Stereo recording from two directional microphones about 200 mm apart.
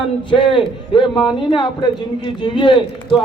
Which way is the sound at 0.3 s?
25° left (ahead or behind).